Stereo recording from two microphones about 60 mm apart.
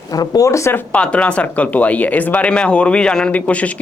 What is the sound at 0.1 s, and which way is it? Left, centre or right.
Speech, left.